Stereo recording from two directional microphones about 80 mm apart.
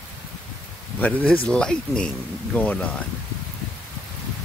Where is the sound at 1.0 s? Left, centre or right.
Centre.